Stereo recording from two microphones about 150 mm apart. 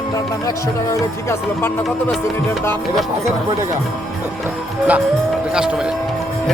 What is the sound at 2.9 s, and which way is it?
Speech, centre (ahead or behind).